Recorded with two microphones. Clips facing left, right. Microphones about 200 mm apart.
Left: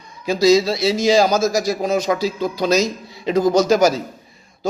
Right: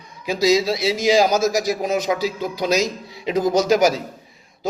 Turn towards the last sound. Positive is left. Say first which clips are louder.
# left 2 dB
turn(degrees=-15)  # may be behind; listen again after turning